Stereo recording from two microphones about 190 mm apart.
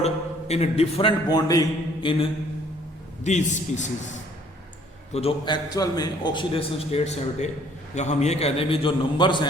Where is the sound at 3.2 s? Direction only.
40° left (ahead or behind).